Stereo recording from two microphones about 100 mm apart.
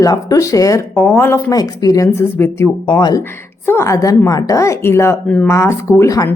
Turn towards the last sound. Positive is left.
turn(degrees=35)  # may be behind; listen again after turning